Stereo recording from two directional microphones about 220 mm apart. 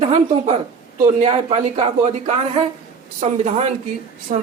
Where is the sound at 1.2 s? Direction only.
25° right (ahead or behind).